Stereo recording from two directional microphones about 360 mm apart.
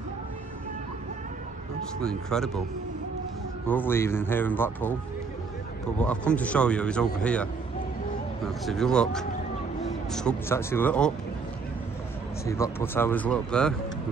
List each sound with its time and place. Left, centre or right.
2.0 s a man's voice: centre
3.6 s a man's voice: centre
5.9 s a man's voice: centre
8.6 s a man's voice: centre
12.4 s a man's voice: centre